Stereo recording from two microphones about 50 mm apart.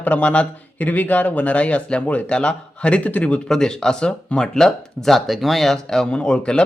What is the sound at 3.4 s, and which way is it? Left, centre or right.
Speech, centre.